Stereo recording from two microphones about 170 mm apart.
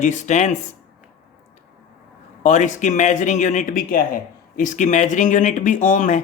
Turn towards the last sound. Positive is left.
turn(degrees=45)  # may be behind; listen again after turning